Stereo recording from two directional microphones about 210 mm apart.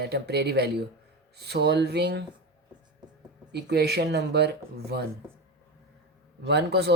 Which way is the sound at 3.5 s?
55° right (ahead or behind).